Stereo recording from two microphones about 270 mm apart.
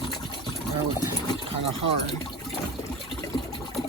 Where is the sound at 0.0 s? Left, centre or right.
Centre.